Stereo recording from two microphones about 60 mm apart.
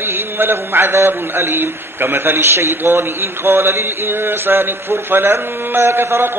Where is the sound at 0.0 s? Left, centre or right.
Right.